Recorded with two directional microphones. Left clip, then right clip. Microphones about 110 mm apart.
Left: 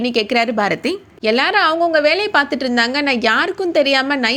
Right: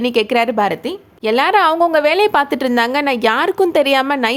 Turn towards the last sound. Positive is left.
turn(degrees=-30)  # may be behind; listen again after turning